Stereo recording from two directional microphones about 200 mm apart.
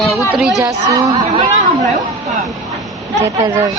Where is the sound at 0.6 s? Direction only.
15° right (ahead or behind).